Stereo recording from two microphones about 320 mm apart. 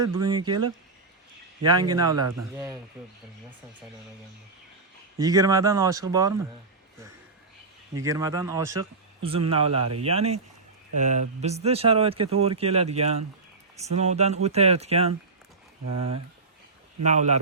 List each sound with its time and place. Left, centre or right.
0.0 s speech: centre
1.6 s speech: centre
5.2 s speech: centre
8.0 s speech: centre
9.8 s speech: right
10.1 s speech: centre
17.0 s speech: right